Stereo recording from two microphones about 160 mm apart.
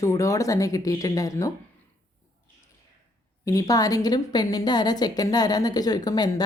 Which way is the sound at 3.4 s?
20° left (ahead or behind).